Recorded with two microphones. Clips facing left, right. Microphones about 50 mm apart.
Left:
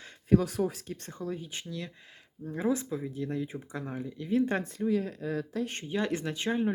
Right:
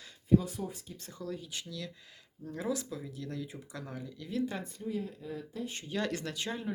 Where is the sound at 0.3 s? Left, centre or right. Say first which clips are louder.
Left 3 dB; left.